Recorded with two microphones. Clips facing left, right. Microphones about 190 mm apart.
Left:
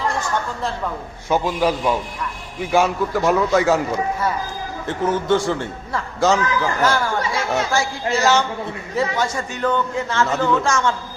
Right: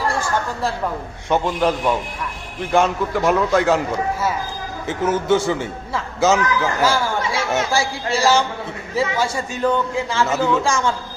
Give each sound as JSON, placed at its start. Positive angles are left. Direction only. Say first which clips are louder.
{"t": 1.3, "sound": "a man's voice", "louder": "even", "side_deg": 5}
{"t": 4.9, "sound": "a man's voice", "louder": "right 1 dB", "side_deg": -5}